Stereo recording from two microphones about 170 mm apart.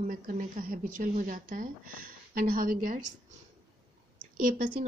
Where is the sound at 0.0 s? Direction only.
55° right (ahead or behind).